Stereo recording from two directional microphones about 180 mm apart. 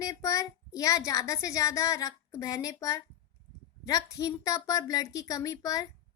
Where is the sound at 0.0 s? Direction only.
20° left (ahead or behind).